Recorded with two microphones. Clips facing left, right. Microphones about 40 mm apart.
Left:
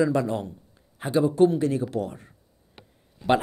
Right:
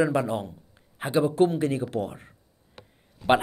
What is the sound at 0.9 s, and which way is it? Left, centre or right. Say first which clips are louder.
Speech: left 2 dB; right.